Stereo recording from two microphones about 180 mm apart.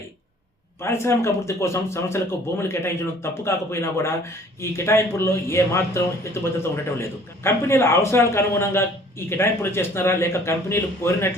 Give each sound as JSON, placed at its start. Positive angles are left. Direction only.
{"t": 0.8, "sound": "speech", "side_deg": 15}